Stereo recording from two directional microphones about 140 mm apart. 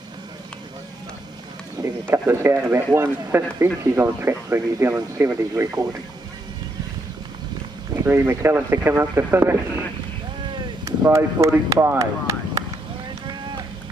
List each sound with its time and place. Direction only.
2.0 s speech: 15° right (ahead or behind)
8.0 s speech: 20° right (ahead or behind)
10.5 s a sound: 20° right (ahead or behind)